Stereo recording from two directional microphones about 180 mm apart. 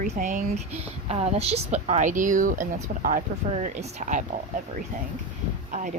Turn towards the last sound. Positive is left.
turn(degrees=-45)  # may be behind; listen again after turning